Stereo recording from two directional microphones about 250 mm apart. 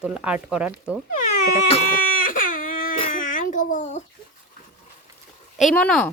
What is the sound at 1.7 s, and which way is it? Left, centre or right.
Baby cry, left.